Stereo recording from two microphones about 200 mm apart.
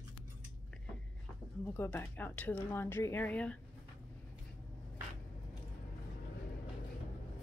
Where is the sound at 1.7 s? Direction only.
10° left (ahead or behind).